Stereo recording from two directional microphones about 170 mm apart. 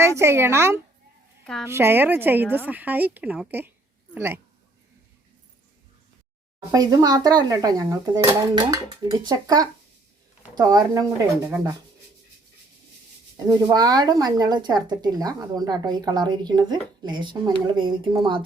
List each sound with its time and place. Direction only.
0.0 s a woman's voice: 15° right (ahead or behind)
6.7 s a woman's voice: 20° right (ahead or behind)
13.3 s a woman's voice: 20° right (ahead or behind)